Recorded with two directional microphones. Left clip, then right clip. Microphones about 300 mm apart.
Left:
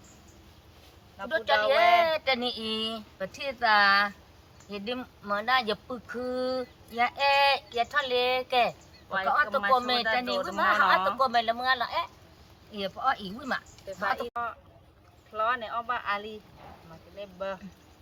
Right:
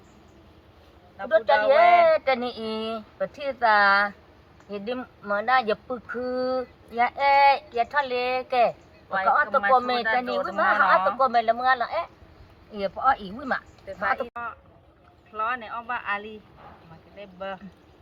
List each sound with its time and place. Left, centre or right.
1.2 s speech: centre
14.0 s speech: centre